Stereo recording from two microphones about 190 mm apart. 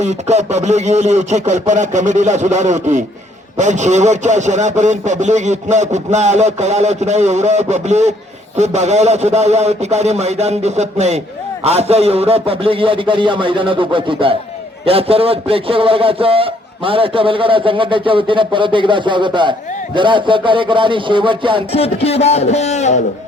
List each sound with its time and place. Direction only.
0.0 s a man's voice: 35° right (ahead or behind)
21.7 s a man's voice: 30° left (ahead or behind)